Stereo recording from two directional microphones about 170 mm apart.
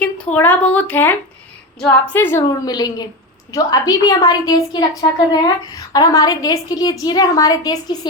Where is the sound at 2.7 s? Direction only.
25° left (ahead or behind).